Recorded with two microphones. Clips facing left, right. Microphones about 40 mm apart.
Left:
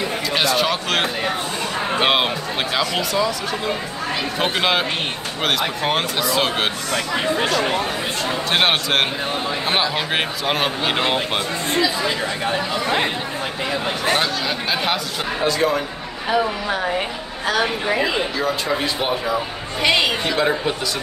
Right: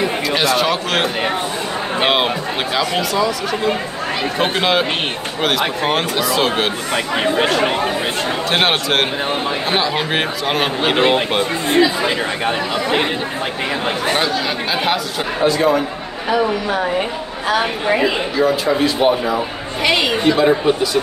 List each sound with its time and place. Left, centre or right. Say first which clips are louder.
0.3 s speech: right 2 dB; centre
6.9 s speech: right 3 dB; right
8.5 s speech: right 1 dB; centre
11.7 s speech: right 5 dB; right
14.1 s speech: right 2 dB; centre
17.5 s speech: right 3 dB; centre
18.0 s speech: right 5 dB; centre